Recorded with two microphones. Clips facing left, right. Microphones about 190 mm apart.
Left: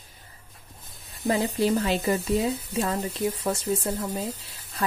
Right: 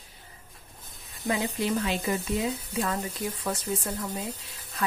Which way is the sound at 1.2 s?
35° left (ahead or behind).